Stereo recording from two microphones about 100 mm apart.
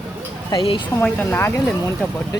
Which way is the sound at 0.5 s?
45° left (ahead or behind).